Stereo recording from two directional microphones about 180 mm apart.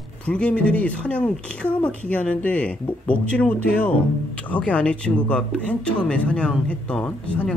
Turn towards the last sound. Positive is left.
turn(degrees=5)  # may be behind; listen again after turning